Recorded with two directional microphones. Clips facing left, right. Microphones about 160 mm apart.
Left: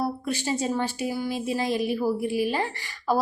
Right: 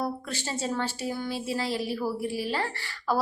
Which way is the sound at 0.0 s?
15° left (ahead or behind).